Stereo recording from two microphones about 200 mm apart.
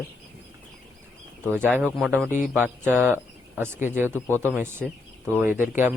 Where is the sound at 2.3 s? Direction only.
40° left (ahead or behind).